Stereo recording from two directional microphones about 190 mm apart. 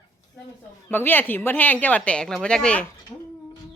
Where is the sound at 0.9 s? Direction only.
10° left (ahead or behind).